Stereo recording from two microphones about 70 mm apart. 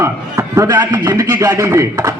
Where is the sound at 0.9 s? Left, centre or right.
Right.